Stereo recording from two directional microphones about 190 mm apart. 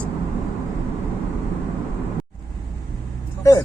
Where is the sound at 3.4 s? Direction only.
15° left (ahead or behind).